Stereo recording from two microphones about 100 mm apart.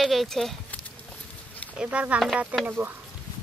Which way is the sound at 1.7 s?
10° right (ahead or behind).